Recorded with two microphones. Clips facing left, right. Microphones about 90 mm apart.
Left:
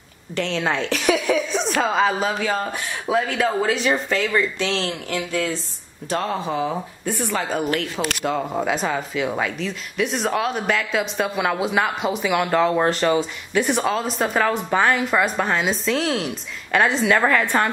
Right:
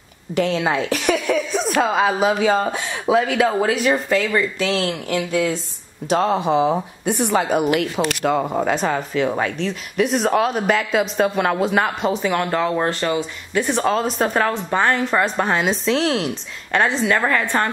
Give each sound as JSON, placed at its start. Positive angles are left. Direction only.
{"t": 0.3, "sound": "speech", "side_deg": -5}
{"t": 2.2, "sound": "speech", "side_deg": -15}
{"t": 3.6, "sound": "speech", "side_deg": -5}
{"t": 4.8, "sound": "speech", "side_deg": -15}
{"t": 12.9, "sound": "a woman's voice", "side_deg": 20}